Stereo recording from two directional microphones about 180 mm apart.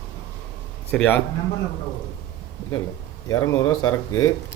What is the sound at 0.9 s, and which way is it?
Speech, 10° left (ahead or behind).